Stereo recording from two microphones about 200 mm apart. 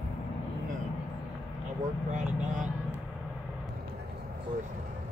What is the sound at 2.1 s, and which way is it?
Vehicle, 40° right (ahead or behind).